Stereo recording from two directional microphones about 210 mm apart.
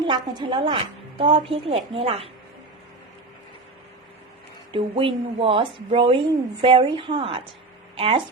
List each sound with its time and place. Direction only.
0.1 s a woman's voice: 20° right (ahead or behind)
4.7 s a woman's voice: 25° right (ahead or behind)